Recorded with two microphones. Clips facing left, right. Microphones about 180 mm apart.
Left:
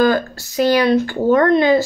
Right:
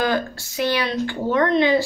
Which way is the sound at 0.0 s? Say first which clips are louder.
Left 6 dB; 40° left (ahead or behind).